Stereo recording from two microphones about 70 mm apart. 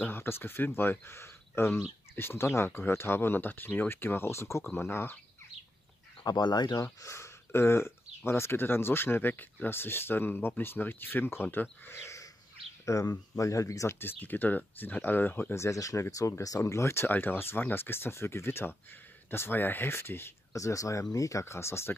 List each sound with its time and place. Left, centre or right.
0.0 s speech: left
6.2 s speech: left
7.0 s speech: left
12.8 s speech: left
13.9 s speech: left
15.5 s speech: left
20.5 s speech: left